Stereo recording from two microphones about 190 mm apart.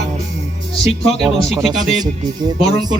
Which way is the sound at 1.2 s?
Centre (ahead or behind).